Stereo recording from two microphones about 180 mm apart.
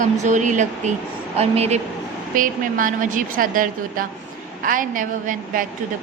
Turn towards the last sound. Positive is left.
turn(degrees=-45)  # may be behind; listen again after turning